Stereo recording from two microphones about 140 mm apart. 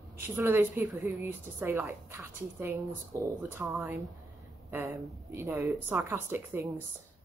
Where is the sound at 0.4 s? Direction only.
15° right (ahead or behind).